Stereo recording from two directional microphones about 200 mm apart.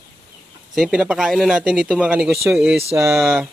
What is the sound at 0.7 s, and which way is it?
A man's voice, 5° right (ahead or behind).